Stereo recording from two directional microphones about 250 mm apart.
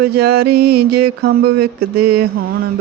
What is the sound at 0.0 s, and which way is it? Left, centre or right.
Speech, right.